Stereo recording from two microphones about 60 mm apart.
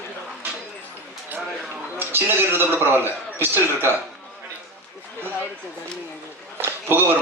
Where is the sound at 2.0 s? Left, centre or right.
Right.